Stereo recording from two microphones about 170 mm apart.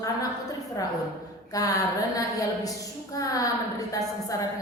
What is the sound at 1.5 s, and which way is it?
A woman's voice, 20° left (ahead or behind).